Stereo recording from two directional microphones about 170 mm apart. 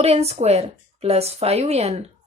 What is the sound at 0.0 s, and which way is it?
Speech, 35° right (ahead or behind).